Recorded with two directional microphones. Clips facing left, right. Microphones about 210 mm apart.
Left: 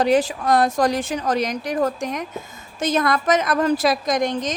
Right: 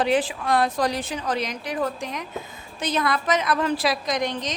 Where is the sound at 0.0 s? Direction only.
40° left (ahead or behind).